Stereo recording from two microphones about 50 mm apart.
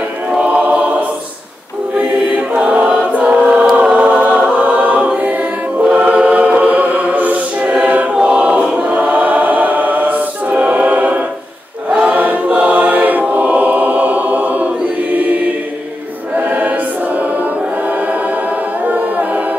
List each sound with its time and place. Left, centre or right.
0.3 s choir: right
2.0 s choir: right
3.9 s choir: right
8.2 s choir: right
16.3 s choir: right
18.9 s a capella: right